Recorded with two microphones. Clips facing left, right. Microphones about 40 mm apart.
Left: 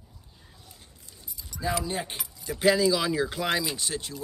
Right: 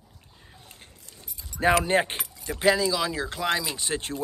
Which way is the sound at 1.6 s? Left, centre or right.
Right.